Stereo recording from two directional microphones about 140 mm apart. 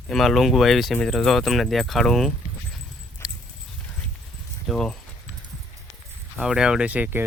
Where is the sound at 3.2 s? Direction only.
20° left (ahead or behind).